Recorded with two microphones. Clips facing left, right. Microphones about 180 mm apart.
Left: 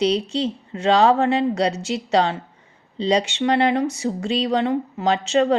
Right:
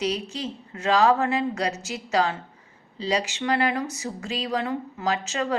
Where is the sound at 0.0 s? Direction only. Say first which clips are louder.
Left 8 dB; 30° left (ahead or behind).